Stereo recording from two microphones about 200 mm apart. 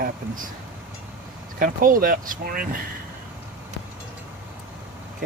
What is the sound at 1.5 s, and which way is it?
Speech, 45° right (ahead or behind).